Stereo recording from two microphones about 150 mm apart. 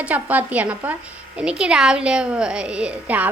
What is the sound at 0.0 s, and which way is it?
Speech, 10° right (ahead or behind).